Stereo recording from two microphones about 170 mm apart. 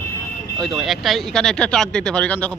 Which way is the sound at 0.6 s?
Centre (ahead or behind).